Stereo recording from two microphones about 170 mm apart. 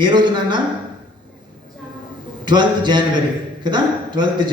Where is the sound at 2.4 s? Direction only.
25° right (ahead or behind).